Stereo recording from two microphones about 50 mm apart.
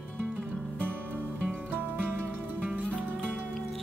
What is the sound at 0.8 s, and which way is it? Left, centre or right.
Music, right.